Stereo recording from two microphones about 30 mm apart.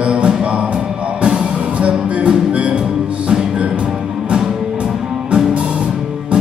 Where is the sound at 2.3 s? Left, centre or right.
Right.